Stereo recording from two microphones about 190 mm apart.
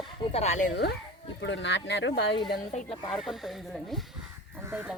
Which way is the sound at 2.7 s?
35° left (ahead or behind).